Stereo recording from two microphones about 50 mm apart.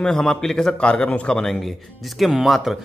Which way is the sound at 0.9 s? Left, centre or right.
Left.